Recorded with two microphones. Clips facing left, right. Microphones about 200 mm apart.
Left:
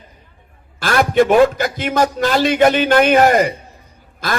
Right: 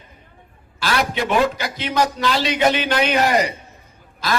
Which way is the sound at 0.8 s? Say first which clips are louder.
Left 8 dB; 50° left (ahead or behind).